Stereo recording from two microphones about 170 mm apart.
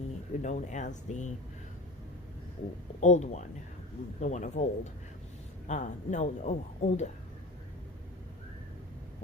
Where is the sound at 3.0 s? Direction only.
45° left (ahead or behind).